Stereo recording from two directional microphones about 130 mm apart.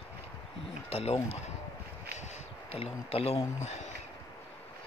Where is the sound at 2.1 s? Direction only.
60° left (ahead or behind).